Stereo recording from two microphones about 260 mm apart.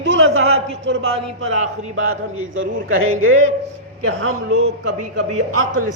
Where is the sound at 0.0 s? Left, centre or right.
Right.